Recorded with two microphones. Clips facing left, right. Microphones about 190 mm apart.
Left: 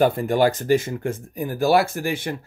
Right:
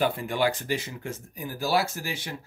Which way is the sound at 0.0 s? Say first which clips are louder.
Left 7 dB; 45° left (ahead or behind).